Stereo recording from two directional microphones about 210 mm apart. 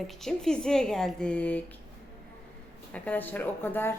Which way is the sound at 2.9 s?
10° left (ahead or behind).